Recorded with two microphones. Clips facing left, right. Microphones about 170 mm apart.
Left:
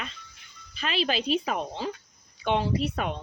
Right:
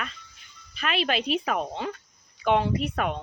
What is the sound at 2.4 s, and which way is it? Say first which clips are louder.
Speech: right 2 dB; 35° left (ahead or behind).